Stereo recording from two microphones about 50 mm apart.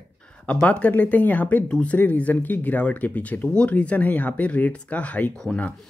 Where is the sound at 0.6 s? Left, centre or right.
Left.